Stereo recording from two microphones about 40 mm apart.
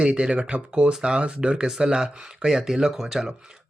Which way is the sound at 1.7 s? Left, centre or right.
Centre.